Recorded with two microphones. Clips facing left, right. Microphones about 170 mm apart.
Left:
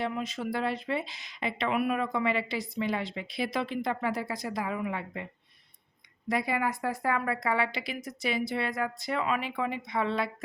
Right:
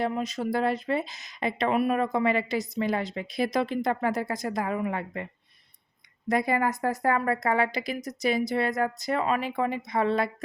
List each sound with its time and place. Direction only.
0.0 s speech: 40° right (ahead or behind)